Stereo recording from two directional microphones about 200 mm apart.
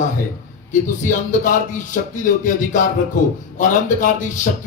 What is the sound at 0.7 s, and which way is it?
Music, 40° left (ahead or behind).